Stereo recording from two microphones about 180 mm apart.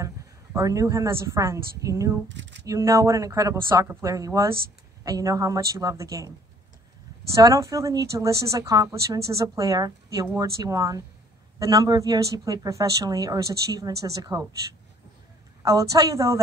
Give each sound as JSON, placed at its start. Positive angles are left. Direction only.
{"t": 0.0, "sound": "a woman's voice", "side_deg": -15}
{"t": 2.2, "sound": "speech", "side_deg": -80}
{"t": 2.6, "sound": "a woman's voice", "side_deg": -20}
{"t": 7.3, "sound": "a woman's voice", "side_deg": -15}
{"t": 15.6, "sound": "speech", "side_deg": -20}